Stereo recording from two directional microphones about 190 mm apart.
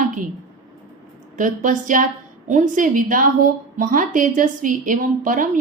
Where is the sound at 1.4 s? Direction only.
45° right (ahead or behind).